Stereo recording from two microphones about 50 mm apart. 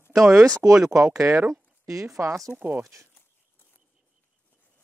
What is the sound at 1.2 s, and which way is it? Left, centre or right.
Speech, right.